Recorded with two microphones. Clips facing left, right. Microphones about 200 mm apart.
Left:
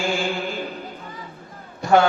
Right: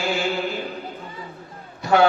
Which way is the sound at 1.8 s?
45° left (ahead or behind).